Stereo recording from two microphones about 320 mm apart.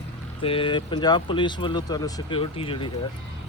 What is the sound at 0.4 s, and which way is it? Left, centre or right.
Speech, centre.